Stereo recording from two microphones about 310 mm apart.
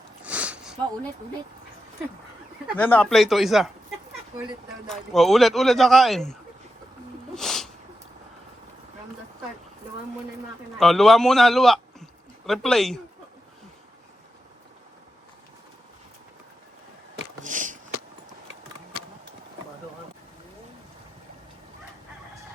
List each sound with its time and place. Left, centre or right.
0.3 s sniff: centre
2.6 s speech: centre
4.9 s speech: centre
7.3 s a sound: centre
10.8 s speech: centre
17.4 s a sound: right